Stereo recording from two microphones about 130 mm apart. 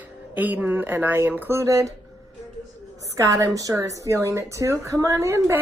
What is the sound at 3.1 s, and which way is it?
A woman's voice, 25° right (ahead or behind).